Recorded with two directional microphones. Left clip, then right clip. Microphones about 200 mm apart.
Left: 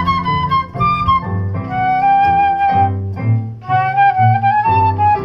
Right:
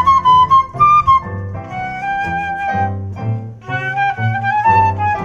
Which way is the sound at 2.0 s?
15° right (ahead or behind).